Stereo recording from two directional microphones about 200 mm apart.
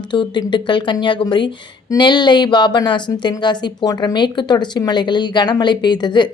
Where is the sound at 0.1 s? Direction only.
20° left (ahead or behind).